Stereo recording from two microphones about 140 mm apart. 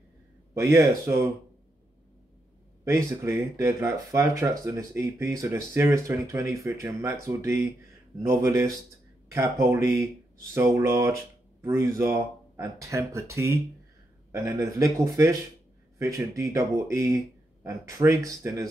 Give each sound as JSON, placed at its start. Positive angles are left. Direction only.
{"t": 0.7, "sound": "speech", "side_deg": -20}
{"t": 2.8, "sound": "speech", "side_deg": -20}